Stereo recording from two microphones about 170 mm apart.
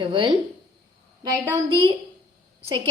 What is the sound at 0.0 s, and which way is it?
Speech, 30° right (ahead or behind).